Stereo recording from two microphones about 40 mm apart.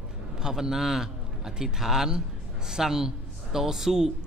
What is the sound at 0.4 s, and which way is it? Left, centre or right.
A man's voice, centre.